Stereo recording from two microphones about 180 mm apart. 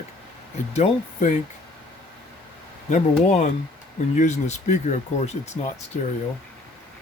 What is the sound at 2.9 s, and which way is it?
Speech, 40° left (ahead or behind).